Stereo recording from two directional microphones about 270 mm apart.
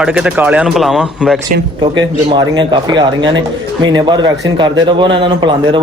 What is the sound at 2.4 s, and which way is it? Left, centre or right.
A man's voice, centre.